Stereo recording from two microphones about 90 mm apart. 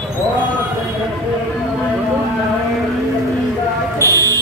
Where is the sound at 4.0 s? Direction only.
35° right (ahead or behind).